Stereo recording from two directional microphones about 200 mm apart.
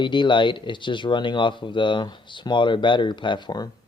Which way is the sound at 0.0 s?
25° left (ahead or behind).